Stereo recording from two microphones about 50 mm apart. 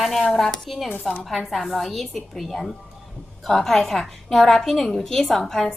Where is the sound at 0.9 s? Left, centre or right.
Left.